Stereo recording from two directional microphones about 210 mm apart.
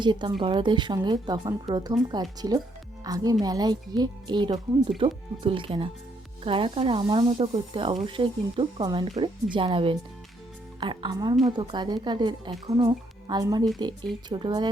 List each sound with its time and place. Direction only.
0.0 s a woman's voice: 20° right (ahead or behind)